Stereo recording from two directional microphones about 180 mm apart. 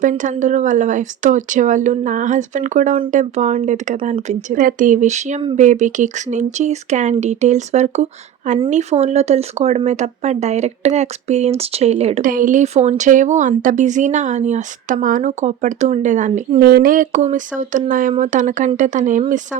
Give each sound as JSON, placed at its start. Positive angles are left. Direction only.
{"t": 0.0, "sound": "speech", "side_deg": -45}
{"t": 12.2, "sound": "speech", "side_deg": -50}
{"t": 16.6, "sound": "speech", "side_deg": -55}